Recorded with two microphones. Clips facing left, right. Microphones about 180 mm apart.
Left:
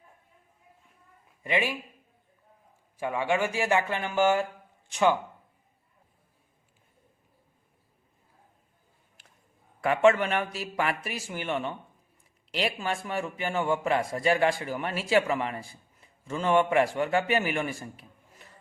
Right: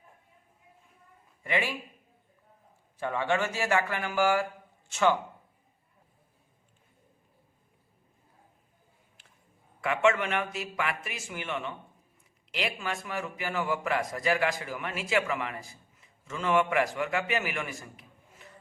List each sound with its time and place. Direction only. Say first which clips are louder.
1.5 s speech: left 2 dB; 15° left (ahead or behind)
3.0 s speech: left 2 dB; 10° left (ahead or behind)
9.8 s a man's voice: left 4 dB; 35° left (ahead or behind)